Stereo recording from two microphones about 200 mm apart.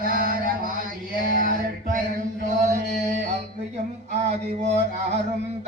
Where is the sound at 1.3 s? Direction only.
45° right (ahead or behind).